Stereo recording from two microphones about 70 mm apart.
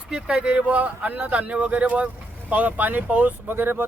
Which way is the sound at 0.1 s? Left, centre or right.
Centre.